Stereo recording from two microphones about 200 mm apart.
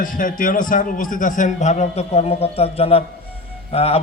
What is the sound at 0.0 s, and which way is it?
A man's voice, 40° left (ahead or behind).